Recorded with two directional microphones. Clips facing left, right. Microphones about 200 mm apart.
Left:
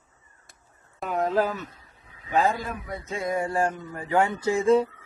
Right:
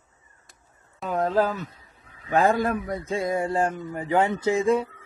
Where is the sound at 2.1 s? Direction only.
55° right (ahead or behind).